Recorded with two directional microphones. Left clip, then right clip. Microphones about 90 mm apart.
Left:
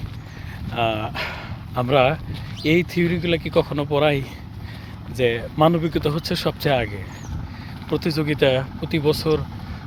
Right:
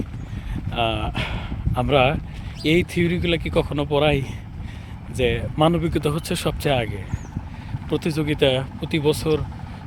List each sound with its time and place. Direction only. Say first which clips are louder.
0.7 s speech: left 1 dB; 25° right (ahead or behind)